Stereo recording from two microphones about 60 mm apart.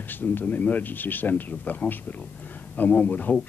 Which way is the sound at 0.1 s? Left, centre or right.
Left.